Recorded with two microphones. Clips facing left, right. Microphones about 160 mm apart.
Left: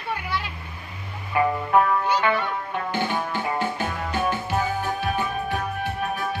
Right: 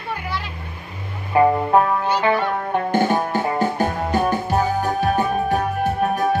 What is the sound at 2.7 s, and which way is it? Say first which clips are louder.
Music: right 8 dB; 45° right (ahead or behind).